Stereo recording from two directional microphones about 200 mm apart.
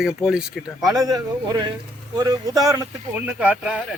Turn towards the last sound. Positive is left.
turn(degrees=-5)  # may be behind; listen again after turning